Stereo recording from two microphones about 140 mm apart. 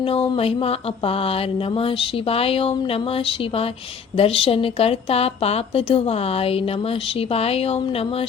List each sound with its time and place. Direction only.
0.0 s a woman's voice: 45° left (ahead or behind)